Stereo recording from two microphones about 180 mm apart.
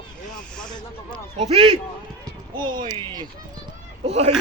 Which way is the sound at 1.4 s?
35° right (ahead or behind).